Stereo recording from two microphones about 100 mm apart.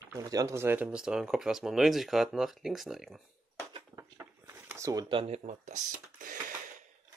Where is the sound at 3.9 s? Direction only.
20° right (ahead or behind).